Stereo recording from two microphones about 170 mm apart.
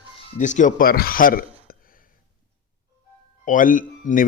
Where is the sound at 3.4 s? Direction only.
50° left (ahead or behind).